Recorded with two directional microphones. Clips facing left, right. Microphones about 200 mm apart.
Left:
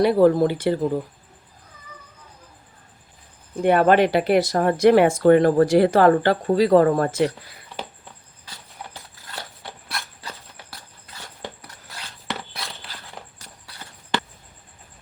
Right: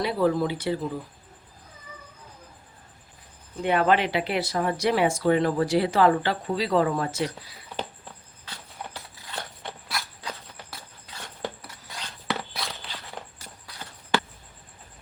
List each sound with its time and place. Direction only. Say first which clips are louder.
0.0 s speech: left 8 dB; 50° left (ahead or behind)
3.5 s speech: left 6 dB; 50° left (ahead or behind)
9.9 s insect: even; centre (ahead or behind)
11.9 s a sound: right 1 dB; centre (ahead or behind)